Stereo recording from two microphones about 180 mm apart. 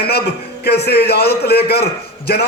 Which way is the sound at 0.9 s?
60° left (ahead or behind).